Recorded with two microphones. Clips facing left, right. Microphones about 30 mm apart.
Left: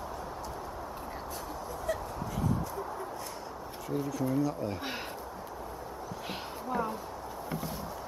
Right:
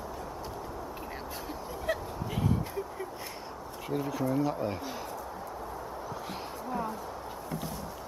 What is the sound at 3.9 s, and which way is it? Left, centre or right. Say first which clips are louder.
Speech: right 1 dB; right.